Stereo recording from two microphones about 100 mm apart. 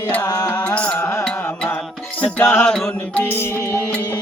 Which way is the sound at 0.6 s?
10° left (ahead or behind).